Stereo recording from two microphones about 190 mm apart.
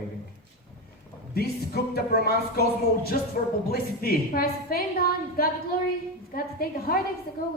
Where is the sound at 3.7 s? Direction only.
50° left (ahead or behind).